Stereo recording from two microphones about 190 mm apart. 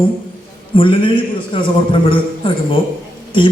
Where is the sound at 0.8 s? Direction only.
25° left (ahead or behind).